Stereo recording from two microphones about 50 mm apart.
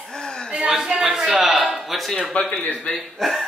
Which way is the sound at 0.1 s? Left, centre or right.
Centre.